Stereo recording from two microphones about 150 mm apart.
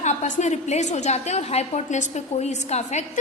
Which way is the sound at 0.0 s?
50° left (ahead or behind).